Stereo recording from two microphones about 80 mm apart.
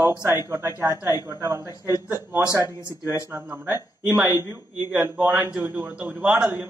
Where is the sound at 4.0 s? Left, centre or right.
Centre.